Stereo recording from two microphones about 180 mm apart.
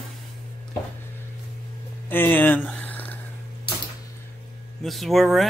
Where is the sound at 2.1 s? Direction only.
10° left (ahead or behind).